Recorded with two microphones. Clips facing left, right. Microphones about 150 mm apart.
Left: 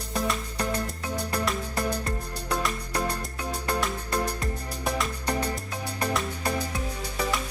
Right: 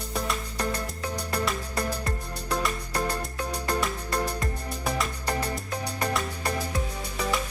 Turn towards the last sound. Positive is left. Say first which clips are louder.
# even
turn(degrees=0)  # may be behind; listen again after turning